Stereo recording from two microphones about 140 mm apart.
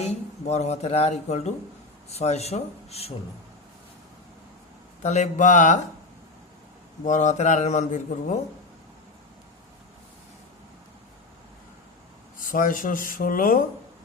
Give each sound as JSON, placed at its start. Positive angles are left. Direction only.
{"t": 0.0, "sound": "speech", "side_deg": 50}
{"t": 5.0, "sound": "a man's voice", "side_deg": 55}
{"t": 7.0, "sound": "a man's voice", "side_deg": 60}
{"t": 12.4, "sound": "speech", "side_deg": 75}